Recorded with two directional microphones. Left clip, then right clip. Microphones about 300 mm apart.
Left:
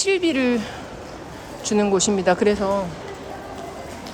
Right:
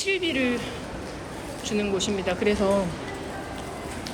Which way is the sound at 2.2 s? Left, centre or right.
Centre.